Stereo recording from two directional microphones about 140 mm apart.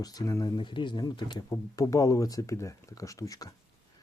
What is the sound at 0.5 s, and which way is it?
Speech, 35° left (ahead or behind).